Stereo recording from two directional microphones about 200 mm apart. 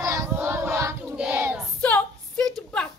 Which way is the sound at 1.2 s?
10° right (ahead or behind).